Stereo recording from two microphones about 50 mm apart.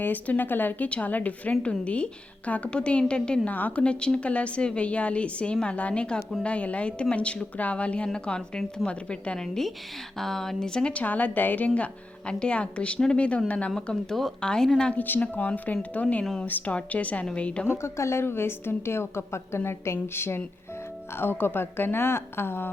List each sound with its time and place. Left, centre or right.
0.0 s a woman's voice: left; by 3.4 s centre
3.4 s a woman's voice: left
8.0 s a woman's voice: centre
10.2 s speech: centre
10.9 s a woman's voice: left; by 14.7 s centre
14.9 s a woman's voice: left
17.7 s a woman's voice: left